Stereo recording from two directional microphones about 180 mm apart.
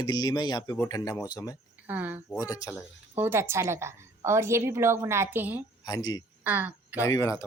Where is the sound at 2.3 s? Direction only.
20° left (ahead or behind).